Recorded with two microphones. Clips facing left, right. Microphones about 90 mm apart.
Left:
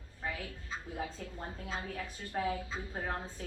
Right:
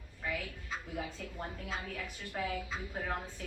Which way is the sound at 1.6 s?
30° left (ahead or behind).